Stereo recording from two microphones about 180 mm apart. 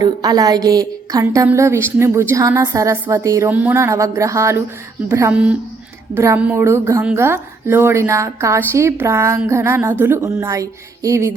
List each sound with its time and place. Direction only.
0.0 s a woman's voice: 20° right (ahead or behind)